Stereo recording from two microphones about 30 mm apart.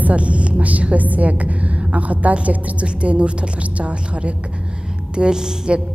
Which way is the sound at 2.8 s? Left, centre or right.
Right.